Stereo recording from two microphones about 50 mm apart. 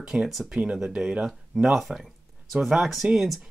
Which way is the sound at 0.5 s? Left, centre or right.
Centre.